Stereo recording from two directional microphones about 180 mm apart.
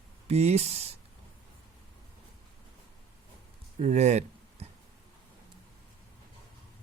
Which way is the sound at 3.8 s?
40° right (ahead or behind).